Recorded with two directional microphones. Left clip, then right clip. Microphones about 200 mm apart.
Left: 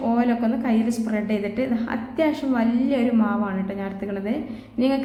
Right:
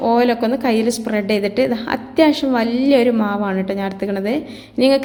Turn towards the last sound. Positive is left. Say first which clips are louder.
# right 9 dB
turn(degrees=-35)  # may be behind; listen again after turning